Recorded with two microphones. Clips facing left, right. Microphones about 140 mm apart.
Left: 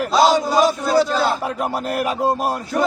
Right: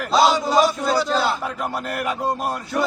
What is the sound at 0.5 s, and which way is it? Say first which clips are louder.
Chant: left 2 dB; 5° left (ahead or behind).